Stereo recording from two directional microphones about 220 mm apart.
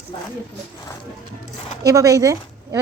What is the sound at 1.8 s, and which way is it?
Speech, 15° right (ahead or behind).